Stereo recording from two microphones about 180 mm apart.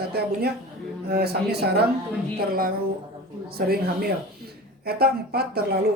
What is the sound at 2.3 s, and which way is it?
A woman's voice, 55° right (ahead or behind).